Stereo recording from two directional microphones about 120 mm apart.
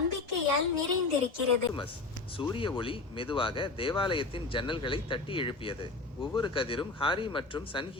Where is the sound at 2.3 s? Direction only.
45° left (ahead or behind).